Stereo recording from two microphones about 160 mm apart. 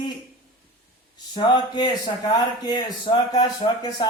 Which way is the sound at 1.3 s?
30° left (ahead or behind).